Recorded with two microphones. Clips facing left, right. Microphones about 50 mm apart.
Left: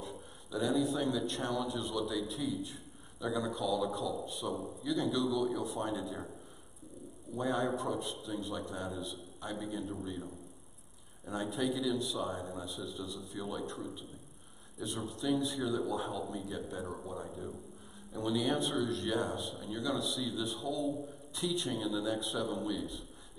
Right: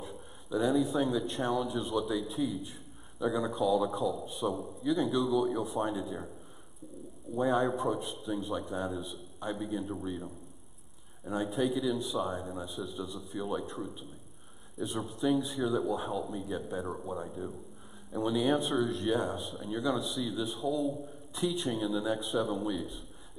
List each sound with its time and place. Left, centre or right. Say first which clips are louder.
0.5 s speech: right 3 dB; centre
4.5 s a man's voice: right 4 dB; centre
4.8 s speech: right 4 dB; centre
7.3 s speech: right 5 dB; centre
11.2 s speech: right 4 dB; centre
11.5 s speech: right 2 dB; centre